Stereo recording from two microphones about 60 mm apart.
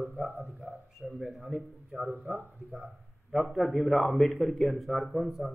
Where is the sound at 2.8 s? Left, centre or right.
Centre.